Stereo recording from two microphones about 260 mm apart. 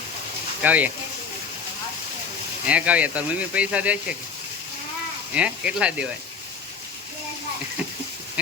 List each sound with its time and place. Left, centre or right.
0.6 s speech: centre
2.6 s speech: centre
5.3 s speech: centre